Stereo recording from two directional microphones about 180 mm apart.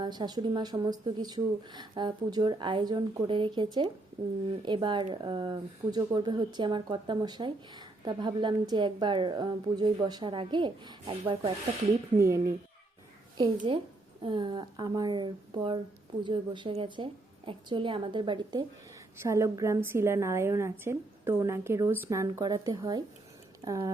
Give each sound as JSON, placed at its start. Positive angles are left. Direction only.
{"t": 0.0, "sound": "speech", "side_deg": -25}
{"t": 12.1, "sound": "a woman's voice", "side_deg": -15}
{"t": 13.7, "sound": "speech", "side_deg": -30}
{"t": 19.2, "sound": "a woman's voice", "side_deg": -15}